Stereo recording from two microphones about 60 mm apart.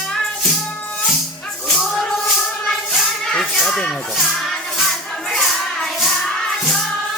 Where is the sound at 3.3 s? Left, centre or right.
Centre.